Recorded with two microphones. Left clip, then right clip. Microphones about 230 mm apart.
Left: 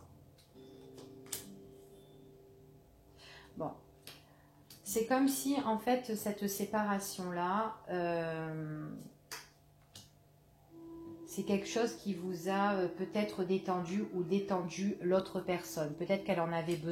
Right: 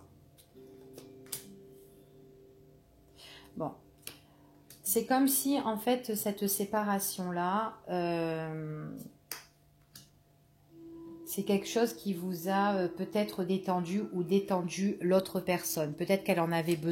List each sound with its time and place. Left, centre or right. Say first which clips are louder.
3.6 s speech: right 3 dB; right
4.8 s speech: right 3 dB; right
11.2 s speech: right 4 dB; right